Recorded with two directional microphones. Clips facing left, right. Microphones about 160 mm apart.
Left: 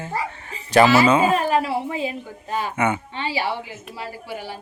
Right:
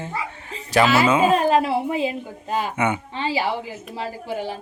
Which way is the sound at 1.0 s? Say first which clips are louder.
Left 1 dB; 5° right (ahead or behind).